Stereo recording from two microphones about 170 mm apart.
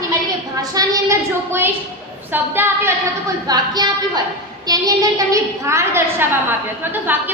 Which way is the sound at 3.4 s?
25° right (ahead or behind).